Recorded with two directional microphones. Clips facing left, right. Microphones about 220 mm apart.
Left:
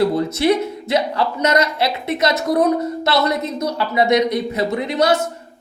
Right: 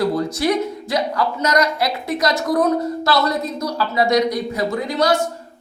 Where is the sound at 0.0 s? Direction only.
25° left (ahead or behind).